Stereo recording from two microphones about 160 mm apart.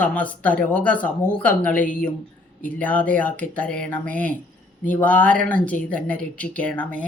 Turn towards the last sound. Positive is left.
turn(degrees=10)  # may be behind; listen again after turning